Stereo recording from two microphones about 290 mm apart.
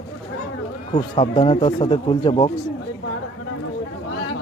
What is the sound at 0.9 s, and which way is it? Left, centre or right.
Speech, centre.